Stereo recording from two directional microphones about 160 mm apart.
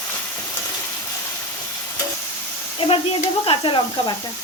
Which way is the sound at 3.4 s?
30° left (ahead or behind).